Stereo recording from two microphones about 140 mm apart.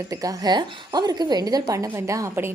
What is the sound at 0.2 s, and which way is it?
A woman's voice, 25° right (ahead or behind).